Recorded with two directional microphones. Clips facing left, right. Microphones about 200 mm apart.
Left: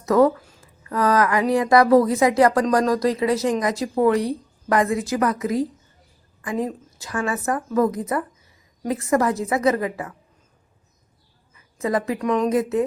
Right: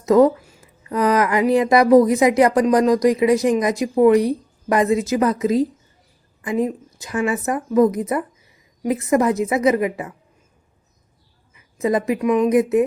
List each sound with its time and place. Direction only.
0.0 s speech: 20° right (ahead or behind)
11.5 s a sound: 20° right (ahead or behind)
12.2 s speech: 10° right (ahead or behind)